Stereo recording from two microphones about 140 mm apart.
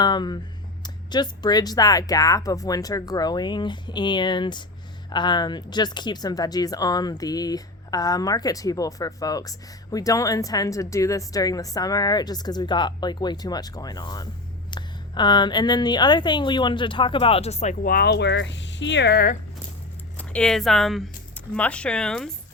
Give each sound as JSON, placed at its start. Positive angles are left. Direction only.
{"t": 0.0, "sound": "a woman's voice", "side_deg": 30}
{"t": 19.1, "sound": "speech", "side_deg": 90}
{"t": 20.1, "sound": "speech", "side_deg": 5}